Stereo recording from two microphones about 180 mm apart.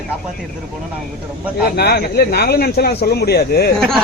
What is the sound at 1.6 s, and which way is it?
Speech, 60° left (ahead or behind).